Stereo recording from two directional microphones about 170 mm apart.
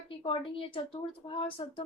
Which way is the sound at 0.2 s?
30° left (ahead or behind).